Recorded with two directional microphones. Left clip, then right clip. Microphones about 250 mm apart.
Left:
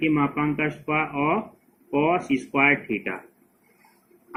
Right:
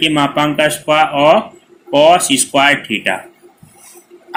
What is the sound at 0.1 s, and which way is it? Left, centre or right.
Speech, right.